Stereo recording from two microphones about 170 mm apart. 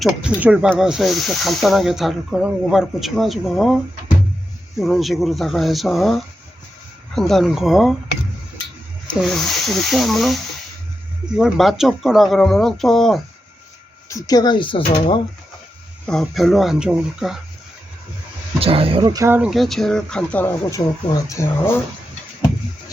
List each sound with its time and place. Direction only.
0.0 s speech: 5° right (ahead or behind)
4.8 s speech: centre (ahead or behind)
9.2 s speech: centre (ahead or behind)
14.1 s speech: 20° left (ahead or behind)
16.0 s speech: centre (ahead or behind)
18.6 s speech: 35° right (ahead or behind)
19.4 s speech: centre (ahead or behind); by 21.8 s 15° left (ahead or behind)